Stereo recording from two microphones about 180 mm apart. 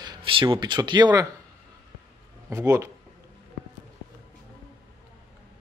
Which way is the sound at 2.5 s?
15° right (ahead or behind).